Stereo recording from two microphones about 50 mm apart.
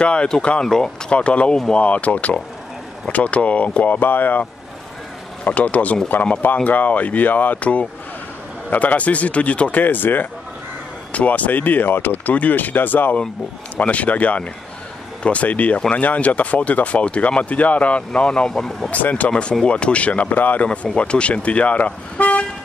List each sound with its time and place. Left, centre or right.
0.0 s speech: left
1.1 s speech: left
5.4 s speech: left
11.1 s speech: left
13.7 s speech: left
20.6 s speech: left